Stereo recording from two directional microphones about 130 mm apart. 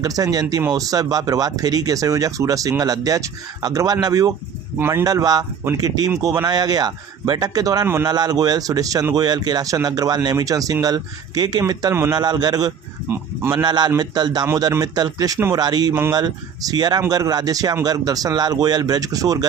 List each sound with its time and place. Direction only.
0.0 s speech: 30° right (ahead or behind)
4.8 s speech: 15° right (ahead or behind)
5.0 s speech: 30° right (ahead or behind)
13.1 s speech: 20° right (ahead or behind)
13.6 s speech: 35° right (ahead or behind)